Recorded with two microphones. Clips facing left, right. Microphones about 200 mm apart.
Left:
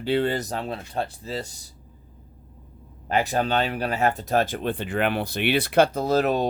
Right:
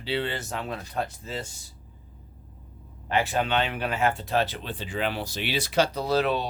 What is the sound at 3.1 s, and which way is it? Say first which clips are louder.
Speech: left 2 dB; 40° left (ahead or behind).